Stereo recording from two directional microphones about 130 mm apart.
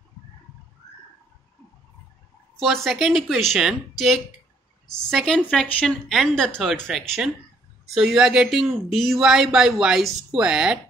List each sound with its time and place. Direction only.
2.6 s speech: centre (ahead or behind)